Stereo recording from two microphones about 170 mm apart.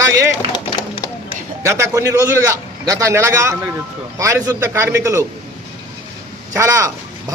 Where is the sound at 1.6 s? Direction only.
15° right (ahead or behind).